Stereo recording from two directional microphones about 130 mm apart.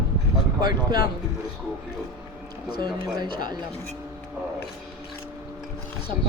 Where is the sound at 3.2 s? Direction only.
35° right (ahead or behind).